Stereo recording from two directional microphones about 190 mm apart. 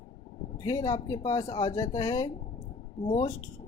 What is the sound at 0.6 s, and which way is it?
Speech, 15° left (ahead or behind).